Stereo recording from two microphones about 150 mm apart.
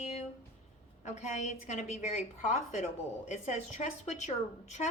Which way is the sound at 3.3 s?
50° left (ahead or behind).